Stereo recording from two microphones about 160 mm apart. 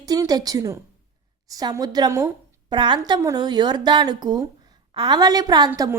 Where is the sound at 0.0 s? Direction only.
25° right (ahead or behind).